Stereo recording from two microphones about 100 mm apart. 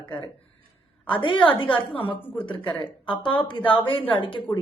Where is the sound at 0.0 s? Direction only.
50° left (ahead or behind).